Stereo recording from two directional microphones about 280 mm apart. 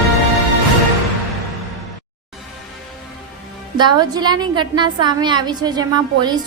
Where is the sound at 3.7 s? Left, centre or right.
Centre.